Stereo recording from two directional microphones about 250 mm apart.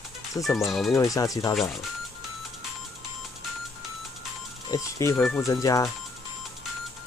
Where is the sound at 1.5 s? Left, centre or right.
Centre.